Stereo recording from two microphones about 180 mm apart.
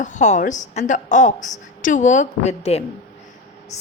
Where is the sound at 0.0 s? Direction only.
40° left (ahead or behind).